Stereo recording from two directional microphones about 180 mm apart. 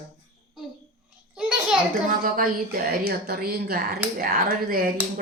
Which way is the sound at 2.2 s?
55° right (ahead or behind).